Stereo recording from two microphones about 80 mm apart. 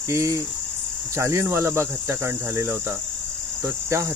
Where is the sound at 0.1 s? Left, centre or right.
Right.